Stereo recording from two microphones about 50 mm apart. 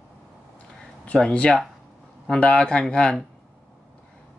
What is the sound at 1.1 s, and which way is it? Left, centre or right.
Speech, left.